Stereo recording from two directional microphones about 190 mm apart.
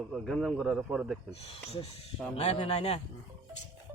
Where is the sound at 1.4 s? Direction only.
30° left (ahead or behind).